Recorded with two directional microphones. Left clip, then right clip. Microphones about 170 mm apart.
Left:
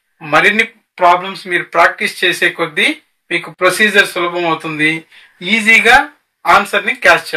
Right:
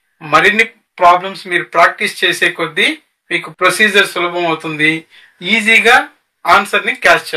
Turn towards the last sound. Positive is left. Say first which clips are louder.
# even
turn(degrees=-20)  # may be behind; listen again after turning